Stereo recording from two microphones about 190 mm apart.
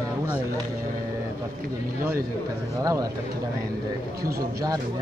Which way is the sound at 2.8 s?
20° right (ahead or behind).